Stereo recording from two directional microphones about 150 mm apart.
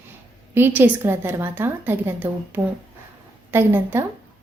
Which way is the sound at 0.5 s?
15° right (ahead or behind).